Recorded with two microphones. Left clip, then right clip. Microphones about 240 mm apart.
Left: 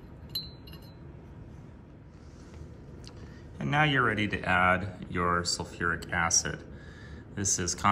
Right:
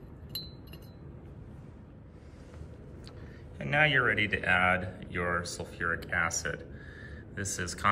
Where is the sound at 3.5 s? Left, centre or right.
Centre.